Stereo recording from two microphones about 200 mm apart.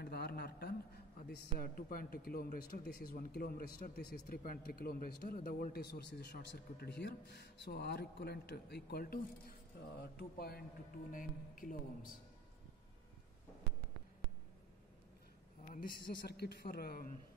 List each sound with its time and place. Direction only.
0.0 s a sound: 55° left (ahead or behind)
1.2 s speech: 50° left (ahead or behind)
15.7 s speech: 50° left (ahead or behind)